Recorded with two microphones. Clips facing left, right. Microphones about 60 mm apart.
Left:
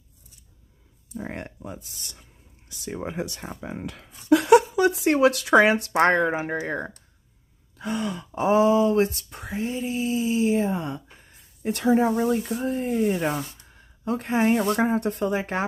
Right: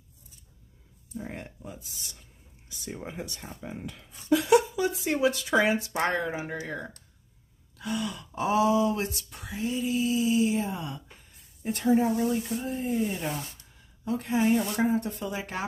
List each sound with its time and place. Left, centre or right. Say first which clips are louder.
1.1 s speech: left 4 dB; left
2.7 s speech: left 6 dB; left
7.7 s throat clearing: left 4 dB; left
8.3 s a sound: left 5 dB; left
11.3 s speech: left 4 dB; left
15.3 s a sound: left 8 dB; left